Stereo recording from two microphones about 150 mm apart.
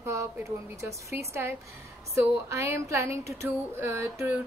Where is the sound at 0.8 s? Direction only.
15° right (ahead or behind).